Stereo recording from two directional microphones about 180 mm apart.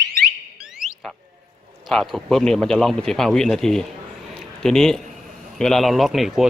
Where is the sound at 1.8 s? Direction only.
Centre (ahead or behind).